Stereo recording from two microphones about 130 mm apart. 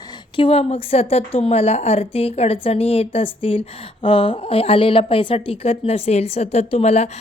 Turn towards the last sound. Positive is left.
turn(degrees=55)  # may be behind; listen again after turning